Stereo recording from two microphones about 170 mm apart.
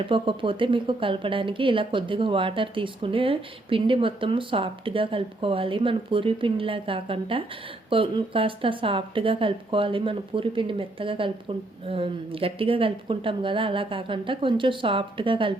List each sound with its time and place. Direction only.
0.0 s speech: 30° right (ahead or behind)